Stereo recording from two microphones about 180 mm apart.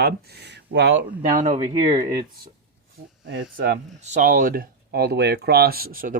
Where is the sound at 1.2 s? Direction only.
45° right (ahead or behind).